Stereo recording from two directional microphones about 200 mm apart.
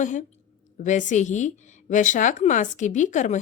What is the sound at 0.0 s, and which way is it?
A woman's voice, 40° left (ahead or behind).